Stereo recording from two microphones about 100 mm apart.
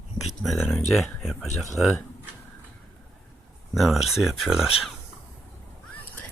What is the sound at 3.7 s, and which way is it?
Speech, centre (ahead or behind).